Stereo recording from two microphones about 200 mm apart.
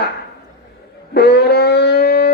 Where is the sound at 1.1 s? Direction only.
55° left (ahead or behind).